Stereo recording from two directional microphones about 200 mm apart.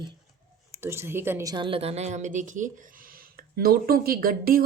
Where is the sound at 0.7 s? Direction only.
10° right (ahead or behind); by 4.6 s 45° right (ahead or behind).